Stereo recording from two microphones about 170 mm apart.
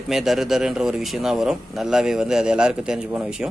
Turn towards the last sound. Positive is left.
turn(degrees=-5)  # may be behind; listen again after turning